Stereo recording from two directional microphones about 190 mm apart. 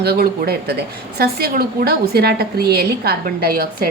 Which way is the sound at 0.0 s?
55° right (ahead or behind).